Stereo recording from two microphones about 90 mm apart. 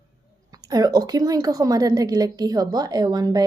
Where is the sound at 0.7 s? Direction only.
45° right (ahead or behind).